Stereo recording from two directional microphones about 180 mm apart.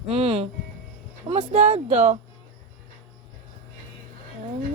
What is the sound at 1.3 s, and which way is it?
Music, 35° right (ahead or behind).